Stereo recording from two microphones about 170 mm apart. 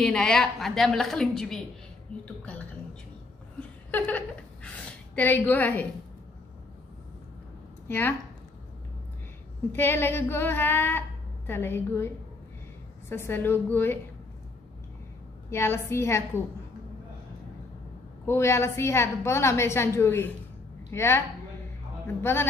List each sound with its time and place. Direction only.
0.0 s a woman's voice: 5° left (ahead or behind)
2.4 s a sound: 10° left (ahead or behind)
3.5 s chuckle: 10° left (ahead or behind)
5.1 s a woman's voice: 10° left (ahead or behind)
9.7 s a woman's voice: 15° left (ahead or behind)
13.1 s a woman's voice: 15° left (ahead or behind)
15.5 s a woman's voice: 15° left (ahead or behind)
18.2 s a woman's voice: 15° left (ahead or behind)